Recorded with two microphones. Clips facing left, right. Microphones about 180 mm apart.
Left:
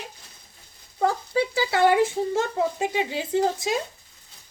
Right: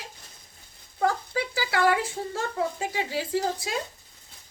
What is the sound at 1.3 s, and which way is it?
A woman's voice, 25° left (ahead or behind).